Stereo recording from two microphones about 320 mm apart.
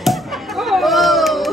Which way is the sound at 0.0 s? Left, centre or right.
Centre.